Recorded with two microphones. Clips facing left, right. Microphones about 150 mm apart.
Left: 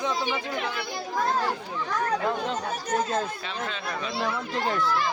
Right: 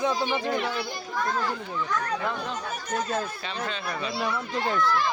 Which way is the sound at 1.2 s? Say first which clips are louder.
Left 1 dB; 30° left (ahead or behind).